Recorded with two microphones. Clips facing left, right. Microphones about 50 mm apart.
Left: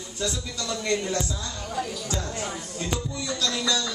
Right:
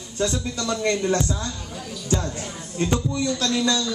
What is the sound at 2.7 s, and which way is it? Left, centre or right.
Speech, right.